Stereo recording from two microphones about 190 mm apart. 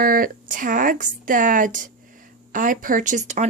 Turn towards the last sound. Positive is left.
turn(degrees=-40)  # may be behind; listen again after turning